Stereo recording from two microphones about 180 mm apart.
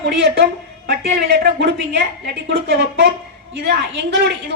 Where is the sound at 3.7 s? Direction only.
70° right (ahead or behind).